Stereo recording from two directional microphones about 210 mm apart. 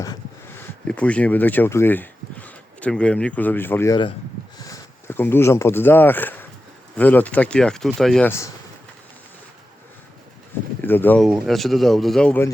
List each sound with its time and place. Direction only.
0.0 s a sound: 15° left (ahead or behind)
0.9 s speech: 5° left (ahead or behind)
10.8 s speech: 10° left (ahead or behind)